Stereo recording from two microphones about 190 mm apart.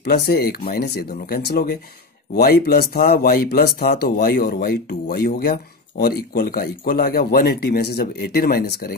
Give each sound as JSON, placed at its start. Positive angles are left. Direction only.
{"t": 0.0, "sound": "speech", "side_deg": 55}